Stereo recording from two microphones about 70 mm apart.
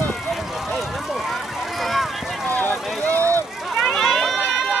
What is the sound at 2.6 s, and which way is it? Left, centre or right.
Vehicle, left.